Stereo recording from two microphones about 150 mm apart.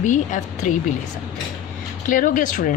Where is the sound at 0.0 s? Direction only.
55° left (ahead or behind).